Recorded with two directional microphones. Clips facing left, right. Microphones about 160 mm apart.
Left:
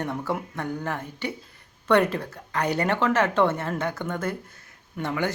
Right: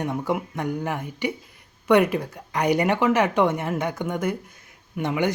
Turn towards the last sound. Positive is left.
turn(degrees=-15)  # may be behind; listen again after turning